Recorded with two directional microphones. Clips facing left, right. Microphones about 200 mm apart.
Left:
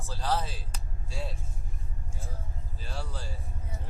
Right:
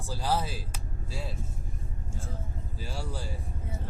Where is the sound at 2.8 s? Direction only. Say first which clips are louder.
Right 2 dB; 10° right (ahead or behind).